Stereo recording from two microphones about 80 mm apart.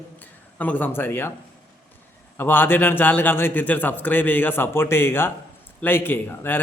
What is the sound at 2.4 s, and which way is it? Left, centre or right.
A man's voice, left.